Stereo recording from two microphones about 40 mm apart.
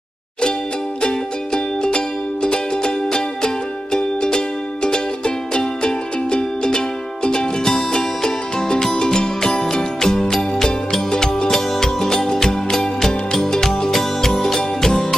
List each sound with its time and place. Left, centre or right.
1.0 s music: left